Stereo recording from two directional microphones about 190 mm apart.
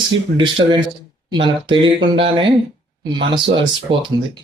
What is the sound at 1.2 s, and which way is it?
Speech, 25° right (ahead or behind).